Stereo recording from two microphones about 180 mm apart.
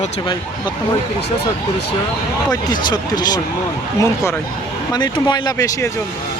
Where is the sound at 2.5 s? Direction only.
20° left (ahead or behind).